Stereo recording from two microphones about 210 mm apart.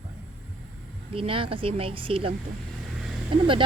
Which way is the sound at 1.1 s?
25° right (ahead or behind).